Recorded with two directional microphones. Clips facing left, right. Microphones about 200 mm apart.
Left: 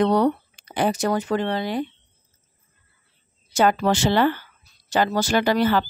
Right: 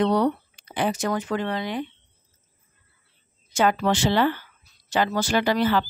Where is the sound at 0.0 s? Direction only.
45° left (ahead or behind).